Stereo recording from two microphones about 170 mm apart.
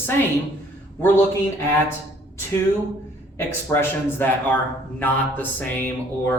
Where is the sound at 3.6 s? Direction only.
15° left (ahead or behind).